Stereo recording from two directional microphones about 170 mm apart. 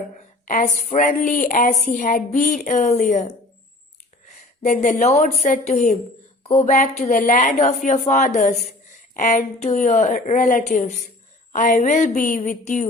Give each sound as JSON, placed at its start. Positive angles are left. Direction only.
{"t": 0.4, "sound": "a woman's voice", "side_deg": 50}